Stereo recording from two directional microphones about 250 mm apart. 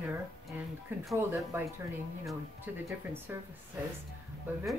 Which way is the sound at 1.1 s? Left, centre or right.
Centre.